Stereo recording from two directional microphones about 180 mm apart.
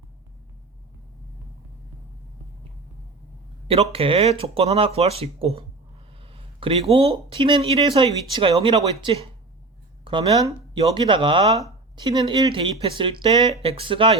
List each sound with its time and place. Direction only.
3.9 s speech: 30° right (ahead or behind)